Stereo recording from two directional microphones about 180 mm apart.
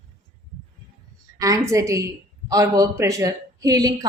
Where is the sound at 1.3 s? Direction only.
20° right (ahead or behind).